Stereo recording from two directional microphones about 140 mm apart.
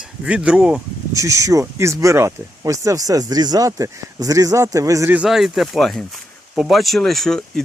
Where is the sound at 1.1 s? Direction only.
25° right (ahead or behind).